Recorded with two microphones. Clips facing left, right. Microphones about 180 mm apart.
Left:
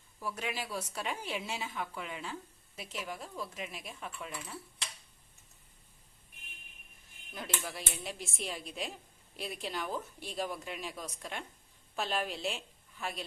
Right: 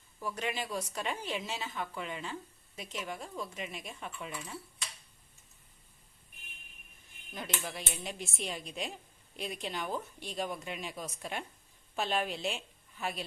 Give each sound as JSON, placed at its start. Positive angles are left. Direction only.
{"t": 0.2, "sound": "a woman's voice", "side_deg": 5}
{"t": 7.6, "sound": "a woman's voice", "side_deg": 0}